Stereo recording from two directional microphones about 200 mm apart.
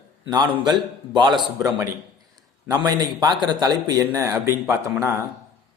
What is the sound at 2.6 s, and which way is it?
A man's voice, 20° right (ahead or behind).